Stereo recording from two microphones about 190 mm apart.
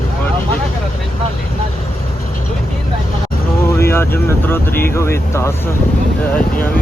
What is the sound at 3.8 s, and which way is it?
Speech, 15° left (ahead or behind).